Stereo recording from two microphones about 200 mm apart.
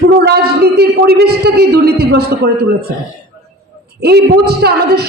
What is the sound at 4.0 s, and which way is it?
A man's voice, 55° right (ahead or behind).